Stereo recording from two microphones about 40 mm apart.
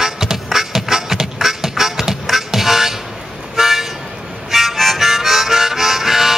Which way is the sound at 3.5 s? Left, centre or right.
Centre.